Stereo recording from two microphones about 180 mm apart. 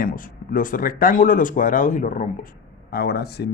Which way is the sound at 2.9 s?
60° left (ahead or behind).